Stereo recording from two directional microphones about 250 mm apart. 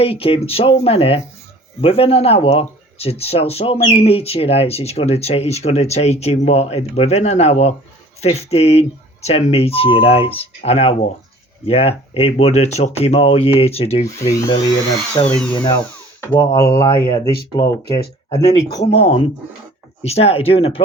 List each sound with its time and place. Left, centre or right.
0.0 s speech: left
15.3 s speech: centre; by 20.8 s left